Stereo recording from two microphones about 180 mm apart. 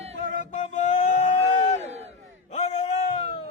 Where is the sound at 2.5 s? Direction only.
40° left (ahead or behind).